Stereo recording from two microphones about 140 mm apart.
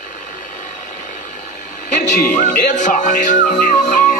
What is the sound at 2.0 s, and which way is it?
Music, 65° left (ahead or behind).